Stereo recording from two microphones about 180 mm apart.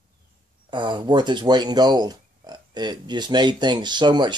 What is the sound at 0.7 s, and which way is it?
Speech, 25° right (ahead or behind).